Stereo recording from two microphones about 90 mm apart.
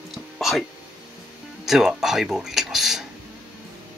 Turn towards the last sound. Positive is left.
turn(degrees=-5)  # may be behind; listen again after turning